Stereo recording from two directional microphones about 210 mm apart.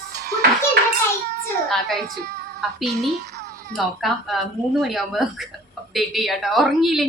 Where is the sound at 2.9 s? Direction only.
55° right (ahead or behind).